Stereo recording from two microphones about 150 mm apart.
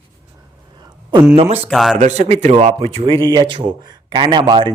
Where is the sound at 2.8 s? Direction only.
40° right (ahead or behind).